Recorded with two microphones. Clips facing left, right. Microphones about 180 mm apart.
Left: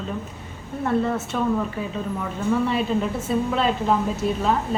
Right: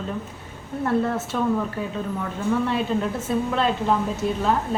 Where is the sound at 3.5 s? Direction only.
5° left (ahead or behind).